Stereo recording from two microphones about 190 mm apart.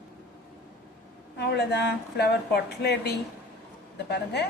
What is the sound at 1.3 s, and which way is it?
Speech, 60° left (ahead or behind).